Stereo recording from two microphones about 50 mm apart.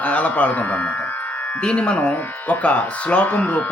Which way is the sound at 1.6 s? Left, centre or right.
Left.